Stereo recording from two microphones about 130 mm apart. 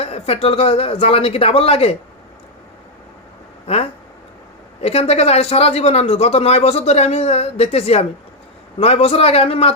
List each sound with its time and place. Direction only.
0.0 s speech: 50° left (ahead or behind)
3.7 s speech: 50° left (ahead or behind)